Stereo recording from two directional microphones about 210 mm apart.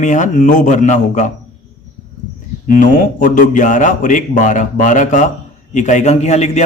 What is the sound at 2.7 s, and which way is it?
A man's voice, 40° left (ahead or behind).